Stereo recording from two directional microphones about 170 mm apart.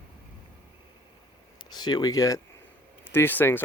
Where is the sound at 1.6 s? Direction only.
25° left (ahead or behind).